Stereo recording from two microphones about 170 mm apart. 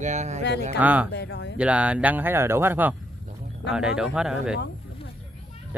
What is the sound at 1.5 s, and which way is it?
Speech, 5° right (ahead or behind).